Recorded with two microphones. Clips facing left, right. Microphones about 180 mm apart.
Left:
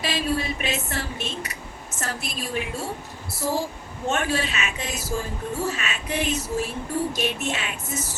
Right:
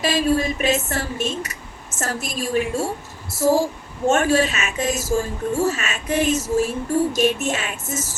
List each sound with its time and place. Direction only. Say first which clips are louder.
0.0 s a woman's voice: right 6 dB; 45° right (ahead or behind)